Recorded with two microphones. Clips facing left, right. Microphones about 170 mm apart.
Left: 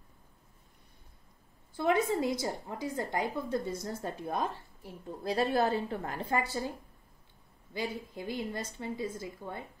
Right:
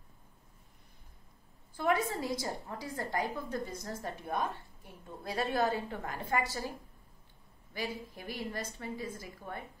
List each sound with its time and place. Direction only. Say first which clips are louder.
1.8 s a woman's voice: left 3 dB; 20° left (ahead or behind)
7.7 s a woman's voice: left 3 dB; 25° left (ahead or behind)